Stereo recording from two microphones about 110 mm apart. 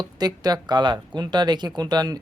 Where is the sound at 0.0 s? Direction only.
40° right (ahead or behind).